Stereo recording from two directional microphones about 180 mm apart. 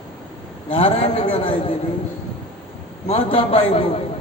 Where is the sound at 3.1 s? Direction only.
30° left (ahead or behind).